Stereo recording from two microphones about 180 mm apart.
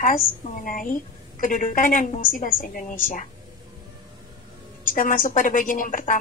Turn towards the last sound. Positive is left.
turn(degrees=50)  # may be behind; listen again after turning